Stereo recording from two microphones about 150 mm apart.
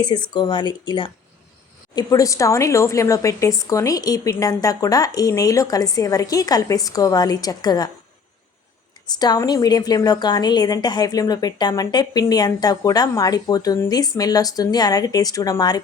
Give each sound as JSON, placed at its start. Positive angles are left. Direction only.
{"t": 0.0, "sound": "a woman's voice", "side_deg": 30}
{"t": 9.0, "sound": "a woman's voice", "side_deg": 25}